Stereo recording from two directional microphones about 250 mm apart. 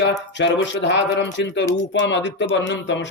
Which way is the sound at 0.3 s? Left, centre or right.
Left.